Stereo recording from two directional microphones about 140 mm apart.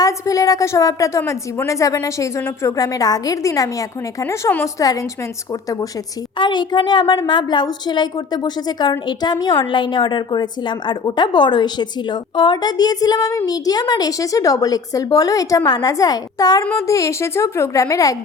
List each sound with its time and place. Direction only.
0.0 s a woman's voice: 25° left (ahead or behind)